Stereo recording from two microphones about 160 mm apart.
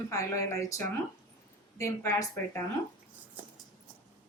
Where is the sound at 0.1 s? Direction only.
20° left (ahead or behind).